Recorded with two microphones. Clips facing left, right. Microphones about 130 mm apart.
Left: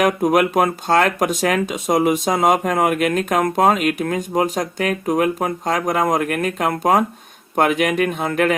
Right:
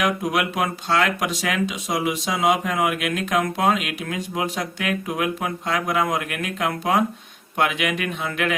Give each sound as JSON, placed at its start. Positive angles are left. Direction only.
{"t": 0.0, "sound": "speech", "side_deg": 45}